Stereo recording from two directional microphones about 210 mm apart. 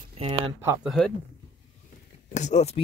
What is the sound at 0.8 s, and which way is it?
Speech, centre (ahead or behind).